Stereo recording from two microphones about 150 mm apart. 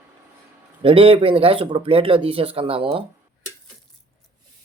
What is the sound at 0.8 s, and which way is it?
Speech, 35° right (ahead or behind).